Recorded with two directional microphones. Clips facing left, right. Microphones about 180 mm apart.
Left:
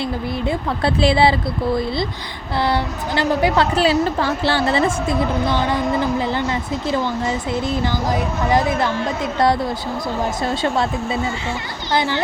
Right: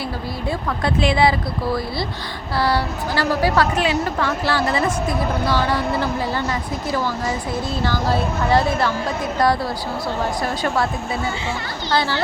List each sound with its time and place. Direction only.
0.4 s a woman's voice: 30° left (ahead or behind)
3.8 s a woman's voice: 30° left (ahead or behind); by 8.9 s 15° left (ahead or behind)
10.4 s a woman's voice: 25° left (ahead or behind)